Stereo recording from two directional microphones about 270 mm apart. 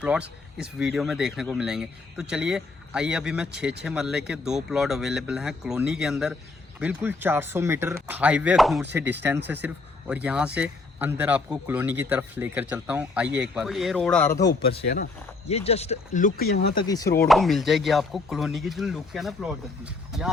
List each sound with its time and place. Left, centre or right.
0.0 s a man's voice: centre
14.8 s speech: left
16.7 s chopping: centre
17.2 s a man's voice: centre